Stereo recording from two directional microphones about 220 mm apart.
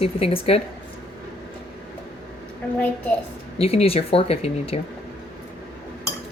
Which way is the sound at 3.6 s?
25° left (ahead or behind).